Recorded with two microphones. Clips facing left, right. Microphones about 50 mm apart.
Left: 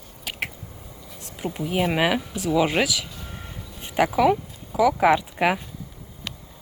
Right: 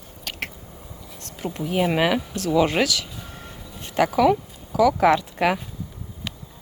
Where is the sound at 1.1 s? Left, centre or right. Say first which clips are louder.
Even; centre.